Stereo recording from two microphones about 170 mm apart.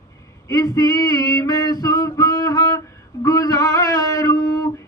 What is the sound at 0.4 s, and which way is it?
Male singing, 20° left (ahead or behind).